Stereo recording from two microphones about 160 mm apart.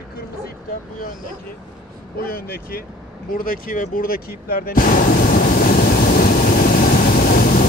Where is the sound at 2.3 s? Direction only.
65° left (ahead or behind).